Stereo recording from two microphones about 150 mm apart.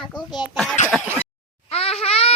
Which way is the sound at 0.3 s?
30° left (ahead or behind).